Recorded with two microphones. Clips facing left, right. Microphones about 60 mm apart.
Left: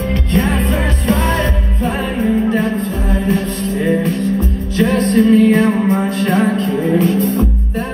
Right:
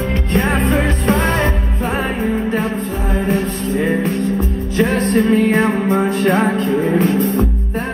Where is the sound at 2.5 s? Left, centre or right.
Right.